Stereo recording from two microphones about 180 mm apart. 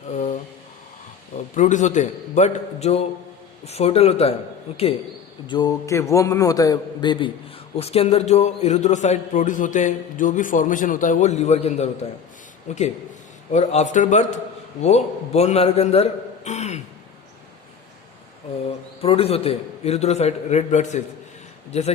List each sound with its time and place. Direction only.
0.1 s a sound: 40° left (ahead or behind)
1.5 s a man's voice: 45° left (ahead or behind)
5.5 s a man's voice: 25° left (ahead or behind); by 16.8 s 40° left (ahead or behind)
19.0 s a man's voice: 35° left (ahead or behind)